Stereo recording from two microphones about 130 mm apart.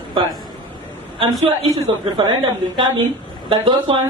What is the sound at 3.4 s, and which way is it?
Speech, 40° right (ahead or behind).